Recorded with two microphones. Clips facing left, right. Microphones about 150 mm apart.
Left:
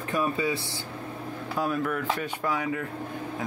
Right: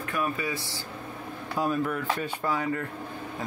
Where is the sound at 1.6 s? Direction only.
10° right (ahead or behind).